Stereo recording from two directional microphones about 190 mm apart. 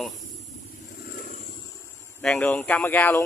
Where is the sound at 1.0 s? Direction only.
50° left (ahead or behind).